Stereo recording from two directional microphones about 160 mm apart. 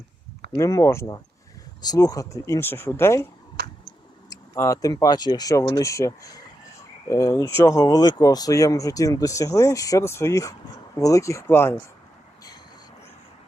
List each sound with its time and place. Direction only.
0.5 s speech: 20° left (ahead or behind)
4.3 s speech: 20° left (ahead or behind)